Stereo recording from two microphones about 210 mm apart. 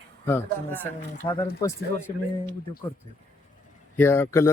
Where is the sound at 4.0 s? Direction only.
10° left (ahead or behind).